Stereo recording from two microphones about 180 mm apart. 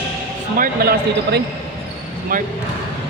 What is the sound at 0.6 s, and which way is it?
Speech, 60° right (ahead or behind).